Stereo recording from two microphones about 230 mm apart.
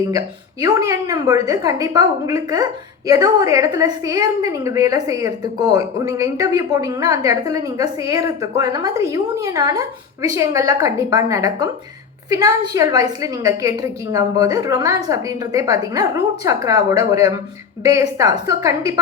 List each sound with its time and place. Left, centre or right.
0.6 s a woman's voice: centre